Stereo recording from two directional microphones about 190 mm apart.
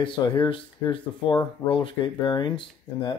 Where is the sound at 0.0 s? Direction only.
25° left (ahead or behind).